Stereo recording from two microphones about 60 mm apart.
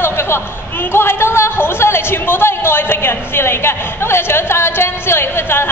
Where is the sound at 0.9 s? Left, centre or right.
Left.